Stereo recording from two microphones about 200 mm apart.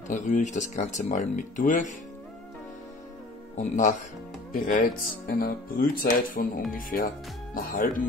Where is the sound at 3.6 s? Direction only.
40° left (ahead or behind).